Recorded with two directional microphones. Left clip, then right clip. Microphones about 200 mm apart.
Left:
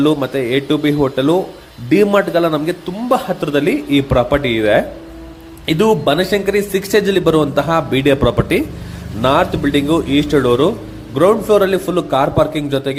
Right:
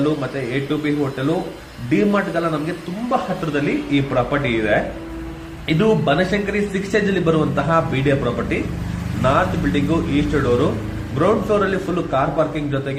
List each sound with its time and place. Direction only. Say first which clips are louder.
0.0 s a man's voice: left 6 dB; 45° left (ahead or behind)